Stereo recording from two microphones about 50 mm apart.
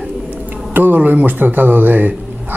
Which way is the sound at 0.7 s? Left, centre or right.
Right.